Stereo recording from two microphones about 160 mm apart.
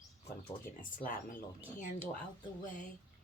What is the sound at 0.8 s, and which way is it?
Speech, 55° left (ahead or behind).